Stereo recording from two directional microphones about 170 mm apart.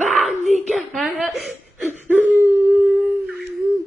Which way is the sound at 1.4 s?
5° right (ahead or behind).